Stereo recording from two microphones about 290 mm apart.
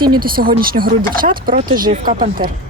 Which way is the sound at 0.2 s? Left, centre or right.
Right.